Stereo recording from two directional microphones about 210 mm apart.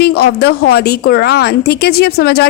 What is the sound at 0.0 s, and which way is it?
A woman's voice, 50° left (ahead or behind).